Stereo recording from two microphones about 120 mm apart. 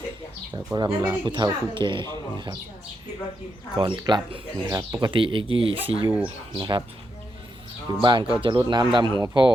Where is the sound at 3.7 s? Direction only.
40° right (ahead or behind).